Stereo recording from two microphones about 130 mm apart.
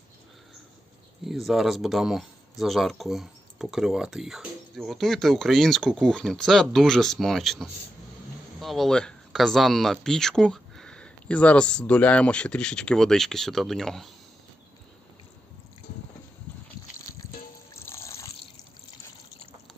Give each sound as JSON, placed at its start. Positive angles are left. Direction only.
{"t": 1.3, "sound": "speech", "side_deg": 0}
{"t": 17.8, "sound": "water", "side_deg": 20}